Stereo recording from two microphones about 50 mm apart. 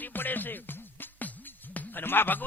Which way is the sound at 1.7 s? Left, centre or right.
Left.